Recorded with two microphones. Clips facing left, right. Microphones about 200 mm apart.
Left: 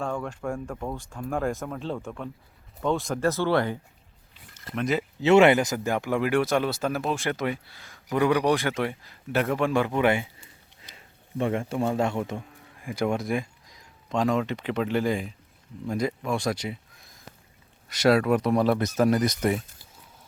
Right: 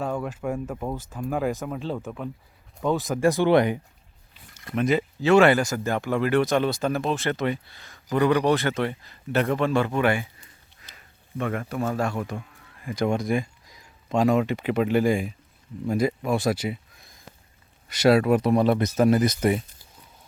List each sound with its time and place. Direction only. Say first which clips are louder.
0.0 s speech: right 2 dB; 5° right (ahead or behind)
3.2 s speech: right 5 dB; 15° right (ahead or behind)
4.6 s speech: right 4 dB; centre (ahead or behind)
5.2 s speech: left 1 dB; 25° left (ahead or behind)
12.8 s speech: right 2 dB; 10° left (ahead or behind)